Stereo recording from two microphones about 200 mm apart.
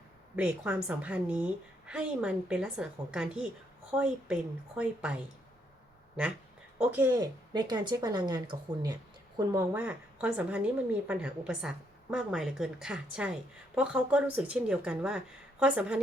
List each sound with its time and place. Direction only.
0.3 s a woman's voice: 5° right (ahead or behind)
6.7 s speech: 5° right (ahead or behind)
7.2 s a woman's voice: 20° right (ahead or behind); by 16.0 s 5° right (ahead or behind)